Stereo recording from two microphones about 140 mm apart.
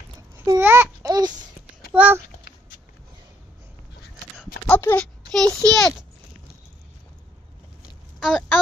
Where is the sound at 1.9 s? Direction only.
10° right (ahead or behind).